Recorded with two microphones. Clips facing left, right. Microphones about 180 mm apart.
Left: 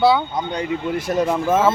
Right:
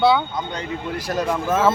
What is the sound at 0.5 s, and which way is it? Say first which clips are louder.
A man's voice: left 5 dB; 25° left (ahead or behind).